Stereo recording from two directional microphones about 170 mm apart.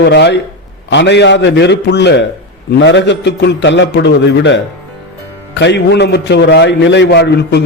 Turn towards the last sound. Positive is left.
turn(degrees=75)  # may be behind; listen again after turning